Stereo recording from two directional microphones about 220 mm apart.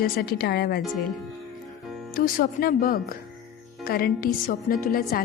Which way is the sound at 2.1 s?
40° left (ahead or behind).